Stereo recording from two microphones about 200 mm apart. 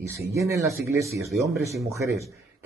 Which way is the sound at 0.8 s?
15° right (ahead or behind).